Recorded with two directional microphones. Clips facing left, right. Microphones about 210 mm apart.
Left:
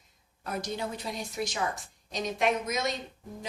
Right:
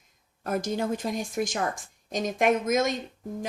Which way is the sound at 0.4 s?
50° right (ahead or behind).